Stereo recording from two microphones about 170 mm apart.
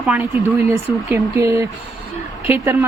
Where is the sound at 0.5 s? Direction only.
15° right (ahead or behind).